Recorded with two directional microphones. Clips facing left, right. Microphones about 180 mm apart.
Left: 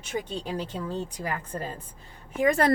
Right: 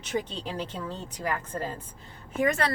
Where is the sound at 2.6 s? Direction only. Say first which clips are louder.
Left 7 dB; 45° left (ahead or behind).